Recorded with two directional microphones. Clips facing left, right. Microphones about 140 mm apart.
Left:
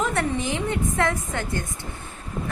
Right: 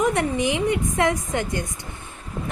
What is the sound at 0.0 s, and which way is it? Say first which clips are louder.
A woman's voice: right 3 dB; 15° right (ahead or behind).